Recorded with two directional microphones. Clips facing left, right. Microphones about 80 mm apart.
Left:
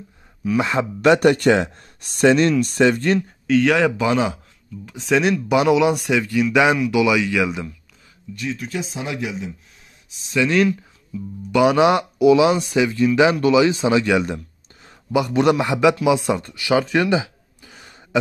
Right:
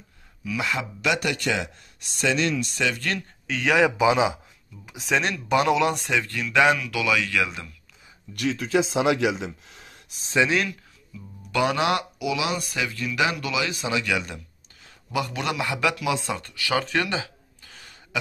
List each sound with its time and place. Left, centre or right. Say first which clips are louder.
0.4 s speech: left 8 dB; left
3.4 s speech: left 4 dB; centre
8.4 s speech: right 4 dB; right
11.5 s speech: left 8 dB; centre
12.2 s speech: left 13 dB; left
16.8 s a sound: left 7 dB; centre